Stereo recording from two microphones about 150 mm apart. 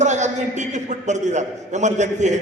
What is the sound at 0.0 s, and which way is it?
A man's voice, 50° right (ahead or behind).